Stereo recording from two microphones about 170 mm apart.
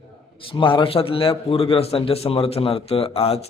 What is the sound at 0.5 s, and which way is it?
A man's voice, 30° left (ahead or behind).